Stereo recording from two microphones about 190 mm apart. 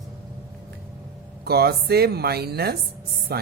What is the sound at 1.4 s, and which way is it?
A woman's voice, 55° right (ahead or behind).